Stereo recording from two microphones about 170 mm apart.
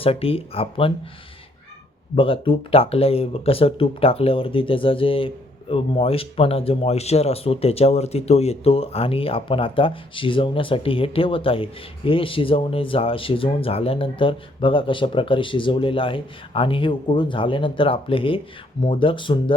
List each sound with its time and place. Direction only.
0.0 s speech: 35° left (ahead or behind)
2.1 s speech: 30° left (ahead or behind)